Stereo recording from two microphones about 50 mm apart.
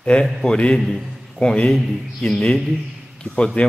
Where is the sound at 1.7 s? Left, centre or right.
Centre.